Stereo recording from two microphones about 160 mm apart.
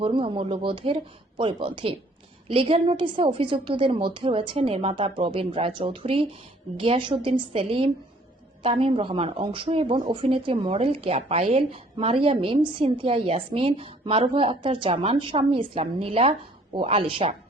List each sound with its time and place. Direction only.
0.0 s speech: 35° right (ahead or behind)